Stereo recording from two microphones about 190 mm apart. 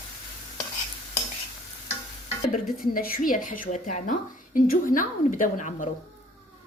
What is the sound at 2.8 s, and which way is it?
A woman's voice, 50° left (ahead or behind).